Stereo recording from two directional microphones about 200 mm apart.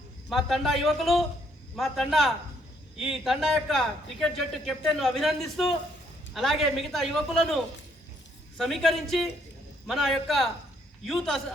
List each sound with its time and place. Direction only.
0.3 s a man's voice: centre (ahead or behind)